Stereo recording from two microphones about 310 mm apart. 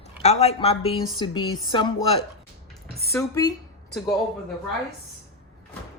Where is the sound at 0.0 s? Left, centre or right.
Left.